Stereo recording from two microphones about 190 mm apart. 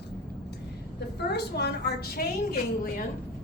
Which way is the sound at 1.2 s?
60° left (ahead or behind).